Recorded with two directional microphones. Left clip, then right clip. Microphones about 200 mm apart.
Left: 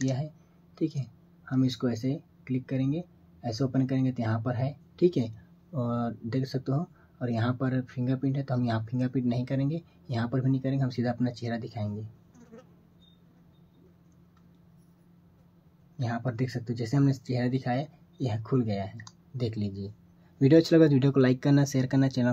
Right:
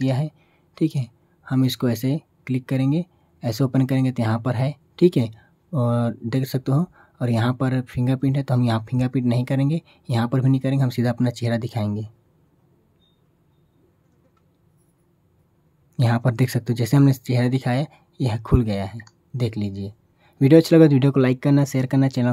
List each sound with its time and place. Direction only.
0.7 s speech: 40° right (ahead or behind)
16.0 s speech: 50° right (ahead or behind); by 22.3 s 20° right (ahead or behind)